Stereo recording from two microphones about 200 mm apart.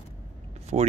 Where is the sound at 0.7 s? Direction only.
30° right (ahead or behind).